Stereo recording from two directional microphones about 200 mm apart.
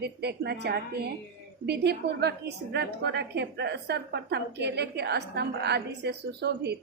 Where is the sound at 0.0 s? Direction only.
55° right (ahead or behind).